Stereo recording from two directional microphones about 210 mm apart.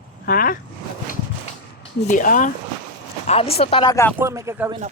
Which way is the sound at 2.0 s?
40° left (ahead or behind).